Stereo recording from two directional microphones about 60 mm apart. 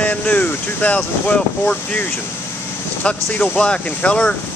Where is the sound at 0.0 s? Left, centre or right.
Left.